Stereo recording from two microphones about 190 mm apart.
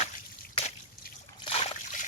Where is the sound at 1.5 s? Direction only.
35° left (ahead or behind).